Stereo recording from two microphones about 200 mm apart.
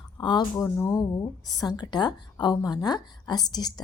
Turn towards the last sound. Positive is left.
turn(degrees=20)  # may be behind; listen again after turning